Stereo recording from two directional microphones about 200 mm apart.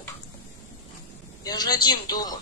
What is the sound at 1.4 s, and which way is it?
Speech, 20° left (ahead or behind).